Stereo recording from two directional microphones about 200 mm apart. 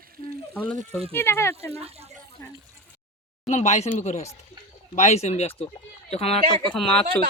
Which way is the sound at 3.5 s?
35° left (ahead or behind).